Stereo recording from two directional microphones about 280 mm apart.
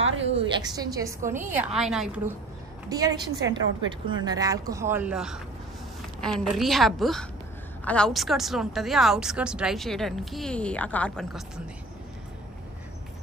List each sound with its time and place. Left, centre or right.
0.0 s a sound: right
0.4 s a woman's voice: centre
2.9 s a woman's voice: centre